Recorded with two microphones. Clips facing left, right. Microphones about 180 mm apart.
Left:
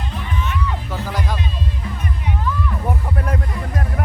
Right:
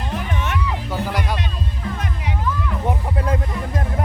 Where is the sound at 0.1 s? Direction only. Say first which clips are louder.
Right 2 dB; 65° right (ahead or behind).